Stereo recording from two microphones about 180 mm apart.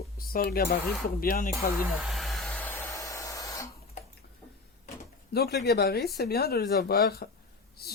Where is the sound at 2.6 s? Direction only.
10° left (ahead or behind).